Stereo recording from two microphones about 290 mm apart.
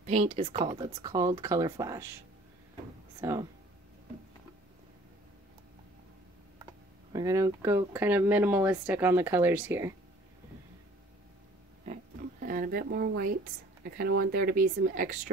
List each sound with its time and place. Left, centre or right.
0.0 s speech: right
3.2 s speech: centre
7.1 s speech: centre
11.8 s a sound: right
13.8 s speech: right